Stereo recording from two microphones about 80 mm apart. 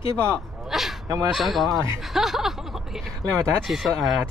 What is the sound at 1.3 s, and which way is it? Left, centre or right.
Speech, centre.